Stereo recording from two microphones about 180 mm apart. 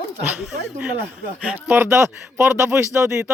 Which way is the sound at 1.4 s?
10° right (ahead or behind).